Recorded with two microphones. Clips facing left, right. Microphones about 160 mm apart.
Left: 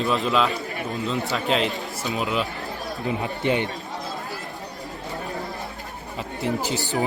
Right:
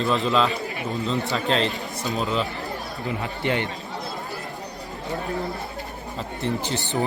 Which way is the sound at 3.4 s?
20° left (ahead or behind).